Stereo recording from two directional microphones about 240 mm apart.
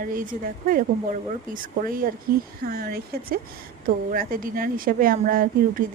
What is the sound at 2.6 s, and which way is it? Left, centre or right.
A woman's voice, right.